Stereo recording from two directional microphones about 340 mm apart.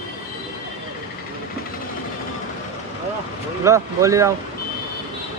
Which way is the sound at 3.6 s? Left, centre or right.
Centre.